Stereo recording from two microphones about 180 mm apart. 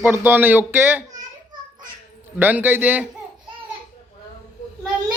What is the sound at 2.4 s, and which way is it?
Speech, 10° right (ahead or behind).